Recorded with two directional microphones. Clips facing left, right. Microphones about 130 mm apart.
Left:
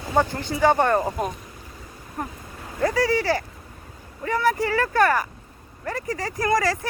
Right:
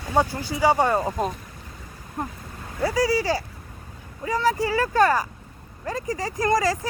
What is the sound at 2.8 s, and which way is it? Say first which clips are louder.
Speech: left 1 dB; 10° right (ahead or behind).